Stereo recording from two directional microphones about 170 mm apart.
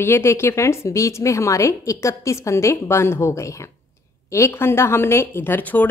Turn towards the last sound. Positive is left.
turn(degrees=10)  # may be behind; listen again after turning